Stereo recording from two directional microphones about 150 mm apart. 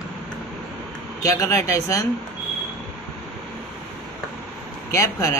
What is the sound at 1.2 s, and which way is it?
Speech, 20° left (ahead or behind).